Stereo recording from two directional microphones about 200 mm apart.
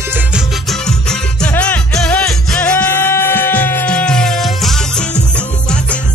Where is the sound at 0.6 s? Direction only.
5° left (ahead or behind).